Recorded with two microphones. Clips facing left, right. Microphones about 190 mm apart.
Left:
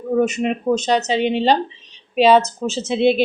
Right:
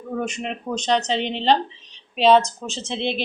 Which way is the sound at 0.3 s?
5° left (ahead or behind).